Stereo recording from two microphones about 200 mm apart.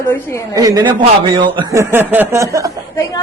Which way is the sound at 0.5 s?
20° right (ahead or behind).